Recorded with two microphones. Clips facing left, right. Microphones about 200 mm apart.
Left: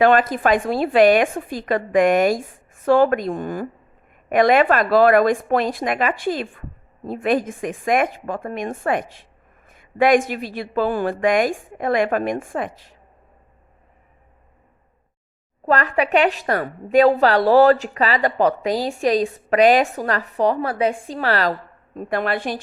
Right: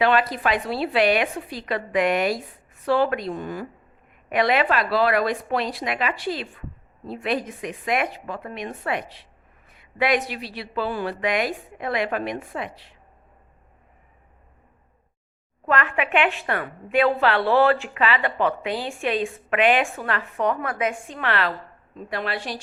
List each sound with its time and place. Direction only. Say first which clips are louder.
0.0 s a woman's voice: left 5 dB; 45° left (ahead or behind)
15.6 s a woman's voice: left 4 dB; 40° left (ahead or behind)
21.9 s a woman's voice: left 6 dB; 50° left (ahead or behind)